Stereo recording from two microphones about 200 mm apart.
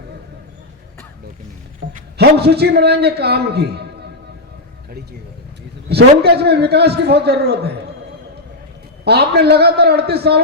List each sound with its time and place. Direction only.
1.9 s a man's voice: 45° right (ahead or behind)
5.9 s a man's voice: 55° right (ahead or behind)
9.0 s a man's voice: 55° right (ahead or behind)